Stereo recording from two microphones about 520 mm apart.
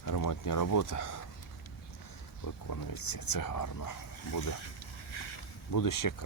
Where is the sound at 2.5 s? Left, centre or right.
Left.